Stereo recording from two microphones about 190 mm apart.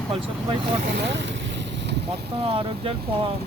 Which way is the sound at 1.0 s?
70° right (ahead or behind).